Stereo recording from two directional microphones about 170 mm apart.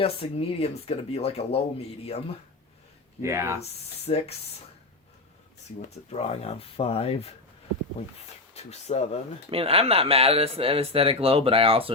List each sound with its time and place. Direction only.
0.0 s speech: 35° left (ahead or behind)
3.2 s speech: 15° right (ahead or behind)
3.6 s speech: 35° left (ahead or behind)
6.1 s speech: 35° left (ahead or behind)
8.5 s speech: 40° left (ahead or behind)
9.5 s speech: 35° right (ahead or behind)